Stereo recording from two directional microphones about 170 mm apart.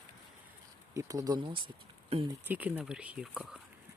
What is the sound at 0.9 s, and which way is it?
Speech, 20° right (ahead or behind).